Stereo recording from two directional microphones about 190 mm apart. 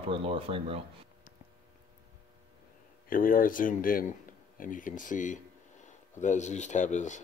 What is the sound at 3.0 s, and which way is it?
A man's voice, 45° left (ahead or behind).